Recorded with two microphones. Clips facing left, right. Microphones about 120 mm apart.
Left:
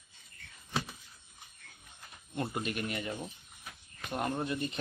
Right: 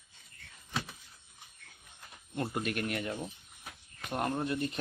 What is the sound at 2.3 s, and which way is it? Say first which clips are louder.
Speech: right 1 dB; 5° left (ahead or behind).